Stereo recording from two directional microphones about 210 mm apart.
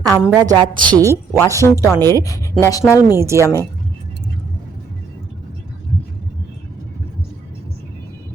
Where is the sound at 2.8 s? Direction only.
10° right (ahead or behind).